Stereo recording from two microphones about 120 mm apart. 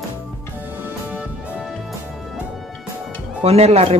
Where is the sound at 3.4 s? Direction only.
60° right (ahead or behind).